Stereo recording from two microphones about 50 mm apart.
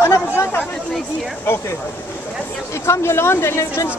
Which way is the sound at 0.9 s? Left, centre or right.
Centre.